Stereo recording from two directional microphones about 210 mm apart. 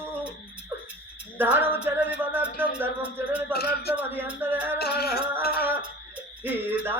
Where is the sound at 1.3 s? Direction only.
10° right (ahead or behind).